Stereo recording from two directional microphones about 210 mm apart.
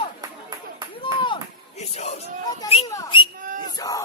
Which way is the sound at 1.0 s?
25° left (ahead or behind).